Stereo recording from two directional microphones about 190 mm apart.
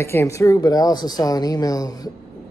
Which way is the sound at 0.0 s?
15° left (ahead or behind).